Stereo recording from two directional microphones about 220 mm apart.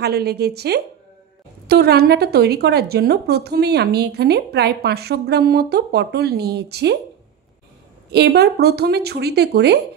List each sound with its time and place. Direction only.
0.0 s a woman's voice: 45° right (ahead or behind)
8.1 s a woman's voice: 50° right (ahead or behind)